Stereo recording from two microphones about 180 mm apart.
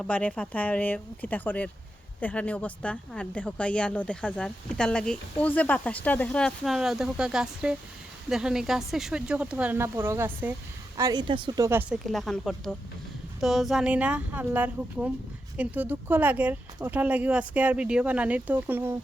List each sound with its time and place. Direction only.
0.0 s a woman's voice: 5° left (ahead or behind); by 18.9 s 10° right (ahead or behind)